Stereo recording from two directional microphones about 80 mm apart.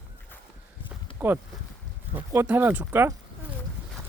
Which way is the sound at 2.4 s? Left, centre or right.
Right.